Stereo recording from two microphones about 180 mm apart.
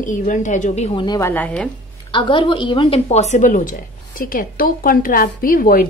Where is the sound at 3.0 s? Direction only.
40° left (ahead or behind).